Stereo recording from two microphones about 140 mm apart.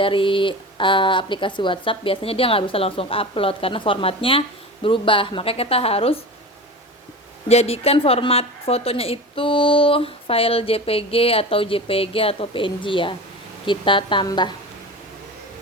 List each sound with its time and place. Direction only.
0.0 s speech: 40° left (ahead or behind)
7.4 s a woman's voice: 50° left (ahead or behind); by 14.5 s 30° left (ahead or behind)